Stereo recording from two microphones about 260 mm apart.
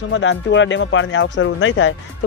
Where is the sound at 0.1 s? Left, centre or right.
Left.